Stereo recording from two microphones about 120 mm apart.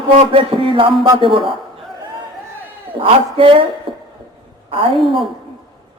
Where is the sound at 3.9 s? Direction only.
45° right (ahead or behind).